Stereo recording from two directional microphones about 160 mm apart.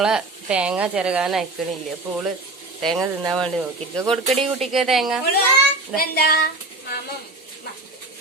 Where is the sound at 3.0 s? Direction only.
20° right (ahead or behind).